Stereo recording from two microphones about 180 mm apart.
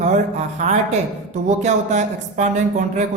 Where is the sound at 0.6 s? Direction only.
40° right (ahead or behind).